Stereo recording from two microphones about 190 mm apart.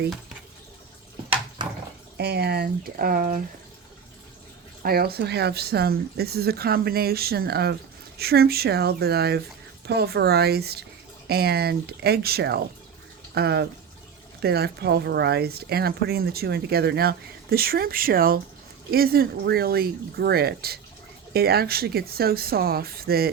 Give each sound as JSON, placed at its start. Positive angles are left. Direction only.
{"t": 2.1, "sound": "a woman's voice", "side_deg": -60}
{"t": 4.8, "sound": "a woman's voice", "side_deg": -55}